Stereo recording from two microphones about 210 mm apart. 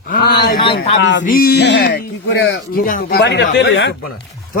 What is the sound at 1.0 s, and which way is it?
Speech, 60° left (ahead or behind).